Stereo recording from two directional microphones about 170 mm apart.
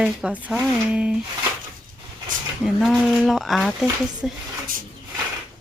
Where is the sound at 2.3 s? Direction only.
50° right (ahead or behind).